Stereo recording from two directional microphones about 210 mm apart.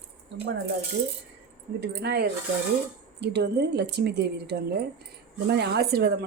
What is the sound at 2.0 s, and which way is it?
Speech, 50° right (ahead or behind).